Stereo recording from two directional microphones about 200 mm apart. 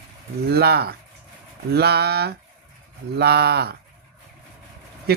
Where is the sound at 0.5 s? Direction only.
55° right (ahead or behind).